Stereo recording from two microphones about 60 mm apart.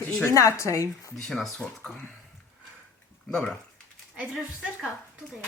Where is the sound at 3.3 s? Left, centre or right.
Centre.